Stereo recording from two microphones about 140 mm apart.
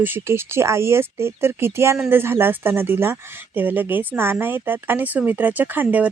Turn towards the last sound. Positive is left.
turn(degrees=-10)  # may be behind; listen again after turning